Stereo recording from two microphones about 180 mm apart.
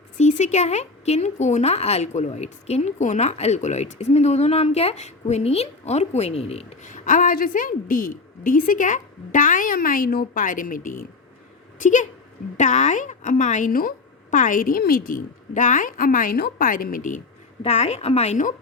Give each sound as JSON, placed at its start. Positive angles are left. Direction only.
{"t": 0.2, "sound": "a woman's voice", "side_deg": 40}
{"t": 17.6, "sound": "speech", "side_deg": 35}